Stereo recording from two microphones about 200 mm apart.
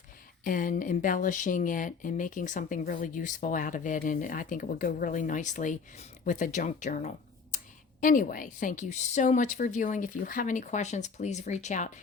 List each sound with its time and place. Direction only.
0.4 s speech: 40° left (ahead or behind)